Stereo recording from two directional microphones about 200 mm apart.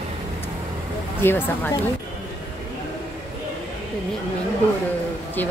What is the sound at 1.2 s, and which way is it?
Speech, 10° left (ahead or behind).